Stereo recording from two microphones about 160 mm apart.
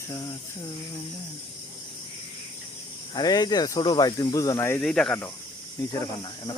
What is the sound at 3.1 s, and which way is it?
Speech, 25° left (ahead or behind).